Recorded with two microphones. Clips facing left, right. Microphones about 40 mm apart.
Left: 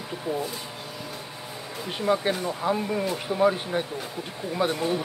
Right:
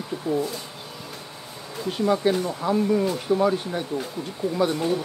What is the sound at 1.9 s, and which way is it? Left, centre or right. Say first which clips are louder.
Speech: right 3 dB; centre.